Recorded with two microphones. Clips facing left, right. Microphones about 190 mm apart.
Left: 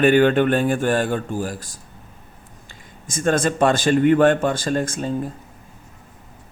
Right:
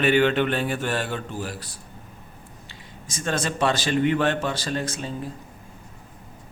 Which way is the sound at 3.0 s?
50° left (ahead or behind).